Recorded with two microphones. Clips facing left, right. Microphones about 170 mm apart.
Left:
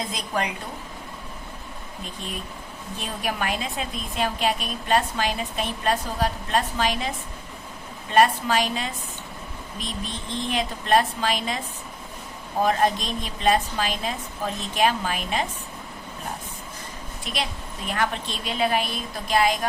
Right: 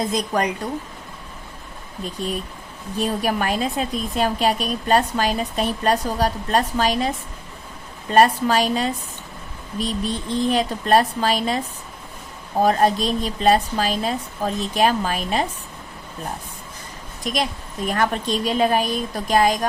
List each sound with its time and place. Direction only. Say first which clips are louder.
0.1 s a woman's voice: right 6 dB; 45° right (ahead or behind)
3.0 s speech: right 7 dB; 40° right (ahead or behind)
8.1 s speech: right 3 dB; 40° right (ahead or behind)
12.6 s speech: right 4 dB; 35° right (ahead or behind)
17.2 s a woman's voice: right 7 dB; 40° right (ahead or behind)